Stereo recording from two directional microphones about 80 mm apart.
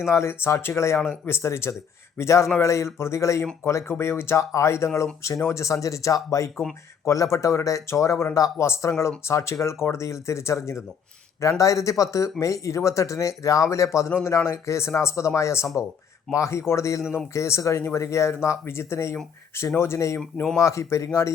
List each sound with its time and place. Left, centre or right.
0.1 s speech: left
20.1 s speech: centre
20.6 s speech: left